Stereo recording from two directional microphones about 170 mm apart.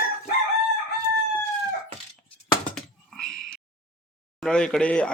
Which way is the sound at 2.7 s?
Centre (ahead or behind).